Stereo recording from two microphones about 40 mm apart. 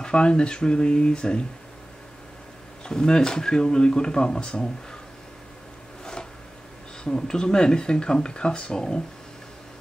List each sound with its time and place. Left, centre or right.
0.0 s speech: left
2.8 s speech: centre
7.1 s speech: centre